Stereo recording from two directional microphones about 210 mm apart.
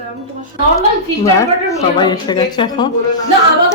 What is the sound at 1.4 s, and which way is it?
A woman's voice, 15° left (ahead or behind).